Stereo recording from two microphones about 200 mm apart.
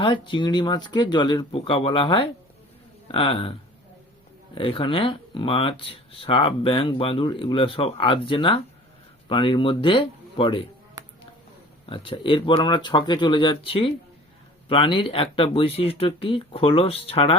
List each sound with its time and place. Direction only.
0.0 s speech: 25° left (ahead or behind)
11.9 s speech: 25° left (ahead or behind)